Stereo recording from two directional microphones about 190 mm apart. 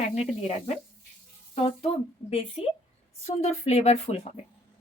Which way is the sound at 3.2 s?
35° left (ahead or behind).